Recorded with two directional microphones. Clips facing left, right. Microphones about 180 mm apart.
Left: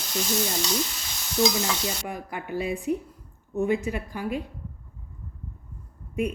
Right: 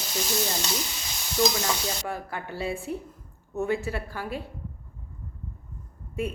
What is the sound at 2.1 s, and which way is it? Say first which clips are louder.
Speech: left 1 dB; 15° left (ahead or behind).